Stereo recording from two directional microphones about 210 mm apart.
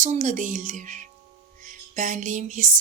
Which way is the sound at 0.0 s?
35° right (ahead or behind).